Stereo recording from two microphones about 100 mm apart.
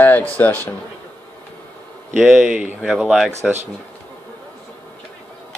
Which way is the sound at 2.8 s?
5° right (ahead or behind).